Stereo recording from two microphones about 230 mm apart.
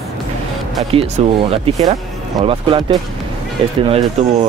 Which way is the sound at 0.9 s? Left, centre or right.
Right.